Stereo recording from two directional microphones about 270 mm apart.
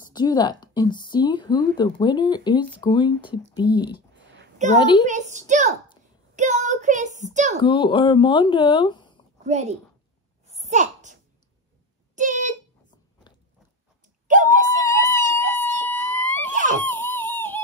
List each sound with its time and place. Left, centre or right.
0.1 s a woman's voice: centre
4.6 s a woman's voice: right
7.6 s a woman's voice: centre
9.5 s a woman's voice: right
10.4 s a sound: right
12.2 s a sound: right
13.3 s biting: centre
14.8 s wail: centre
16.8 s a sound: centre